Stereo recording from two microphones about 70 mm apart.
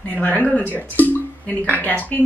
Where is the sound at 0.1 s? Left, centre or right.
Left.